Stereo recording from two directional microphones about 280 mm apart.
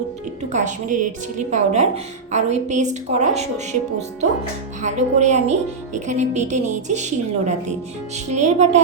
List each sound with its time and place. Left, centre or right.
0.5 s a woman's voice: right
4.8 s a woman's voice: right